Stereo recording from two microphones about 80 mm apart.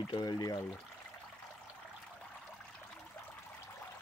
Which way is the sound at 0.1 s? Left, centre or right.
Left.